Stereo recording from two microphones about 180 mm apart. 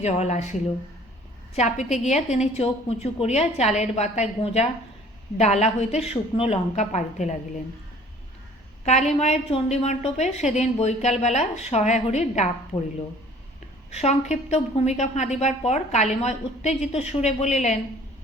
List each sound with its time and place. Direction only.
0.0 s a woman's voice: 40° left (ahead or behind)
1.5 s a woman's voice: 40° left (ahead or behind)
8.8 s a woman's voice: 35° left (ahead or behind)
13.9 s a woman's voice: 40° left (ahead or behind)